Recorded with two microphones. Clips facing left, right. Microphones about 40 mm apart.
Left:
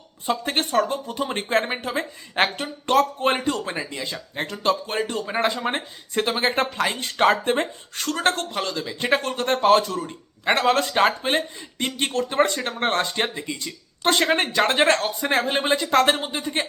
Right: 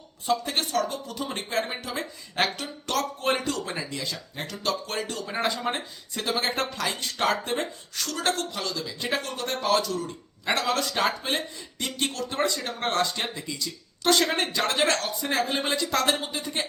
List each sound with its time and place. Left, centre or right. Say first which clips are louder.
0.3 s speech: left 3 dB; left